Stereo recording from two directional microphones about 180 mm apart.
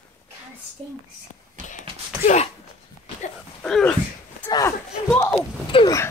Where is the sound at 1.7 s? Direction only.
45° left (ahead or behind).